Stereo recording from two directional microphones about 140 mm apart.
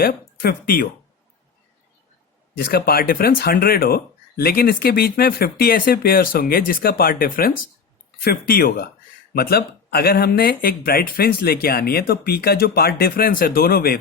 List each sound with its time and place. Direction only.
0.0 s speech: 90° left
2.6 s speech: 90° left